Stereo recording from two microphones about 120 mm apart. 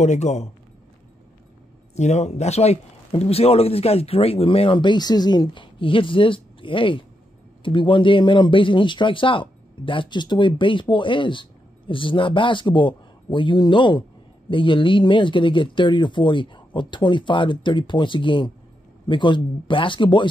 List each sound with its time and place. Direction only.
0.0 s speech: 75° left (ahead or behind)
2.0 s speech: 75° left (ahead or behind); by 20.2 s 40° left (ahead or behind)